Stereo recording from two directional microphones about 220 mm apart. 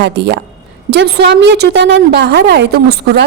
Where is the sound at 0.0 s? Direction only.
50° right (ahead or behind).